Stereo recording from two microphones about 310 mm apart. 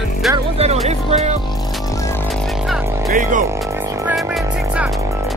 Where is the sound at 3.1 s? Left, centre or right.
Right.